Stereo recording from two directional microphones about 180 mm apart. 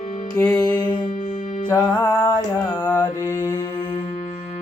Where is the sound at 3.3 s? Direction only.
20° left (ahead or behind).